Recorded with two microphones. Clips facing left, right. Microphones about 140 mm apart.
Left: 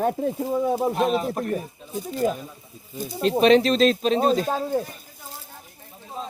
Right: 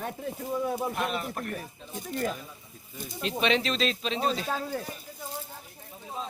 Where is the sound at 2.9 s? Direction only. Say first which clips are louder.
Left 10 dB; 35° left (ahead or behind).